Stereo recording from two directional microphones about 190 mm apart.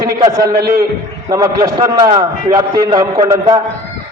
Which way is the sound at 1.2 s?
20° right (ahead or behind).